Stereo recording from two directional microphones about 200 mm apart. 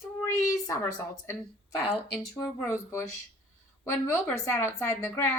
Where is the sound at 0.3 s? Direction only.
15° left (ahead or behind).